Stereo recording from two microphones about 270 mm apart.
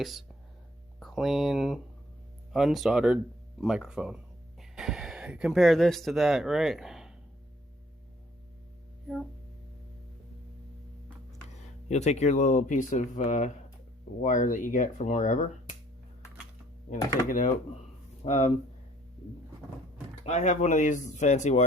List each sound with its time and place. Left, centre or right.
0.0 s speech: centre
11.4 s speech: left
17.2 s speech: left
20.2 s speech: left